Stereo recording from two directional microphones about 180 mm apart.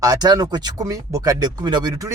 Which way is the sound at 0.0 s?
20° right (ahead or behind).